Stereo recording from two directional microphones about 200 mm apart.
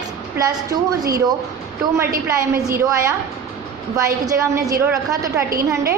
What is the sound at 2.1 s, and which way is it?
Speech, 45° right (ahead or behind).